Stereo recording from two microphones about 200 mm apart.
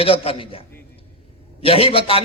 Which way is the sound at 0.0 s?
30° left (ahead or behind).